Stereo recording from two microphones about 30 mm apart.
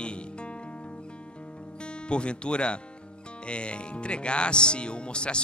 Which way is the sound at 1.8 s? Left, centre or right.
Left.